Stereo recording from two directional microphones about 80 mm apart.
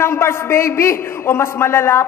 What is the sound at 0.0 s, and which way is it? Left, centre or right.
A woman's voice, left.